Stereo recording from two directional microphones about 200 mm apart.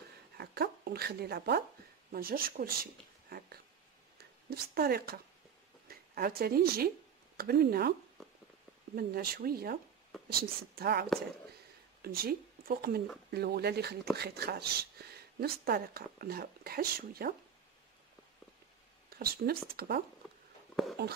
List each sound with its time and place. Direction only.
0.4 s a woman's voice: 50° right (ahead or behind)
8.9 s speech: 50° right (ahead or behind)
19.0 s speech: 50° right (ahead or behind)